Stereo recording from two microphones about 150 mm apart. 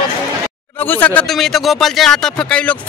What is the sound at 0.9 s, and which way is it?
Speech, 10° left (ahead or behind).